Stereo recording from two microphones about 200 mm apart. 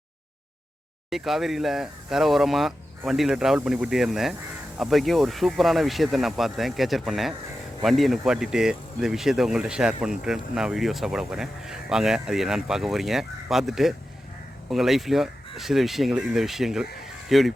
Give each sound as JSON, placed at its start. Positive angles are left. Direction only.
{"t": 1.1, "sound": "speech", "side_deg": 0}